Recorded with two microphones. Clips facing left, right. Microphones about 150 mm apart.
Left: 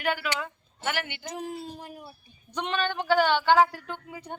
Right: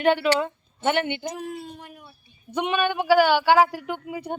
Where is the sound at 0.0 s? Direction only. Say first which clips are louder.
Right 9 dB; 25° right (ahead or behind).